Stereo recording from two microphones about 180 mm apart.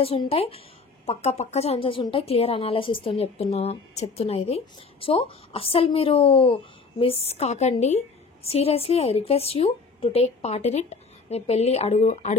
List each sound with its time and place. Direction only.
0.0 s a woman's voice: 35° left (ahead or behind)